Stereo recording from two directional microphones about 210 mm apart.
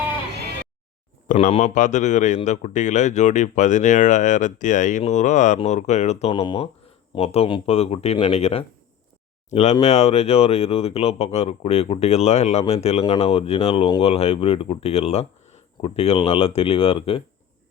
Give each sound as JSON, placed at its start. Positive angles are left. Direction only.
{"t": 1.3, "sound": "a man's voice", "side_deg": 35}